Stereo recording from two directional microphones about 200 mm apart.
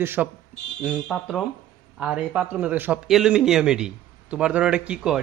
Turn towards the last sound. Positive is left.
turn(degrees=-5)  # may be behind; listen again after turning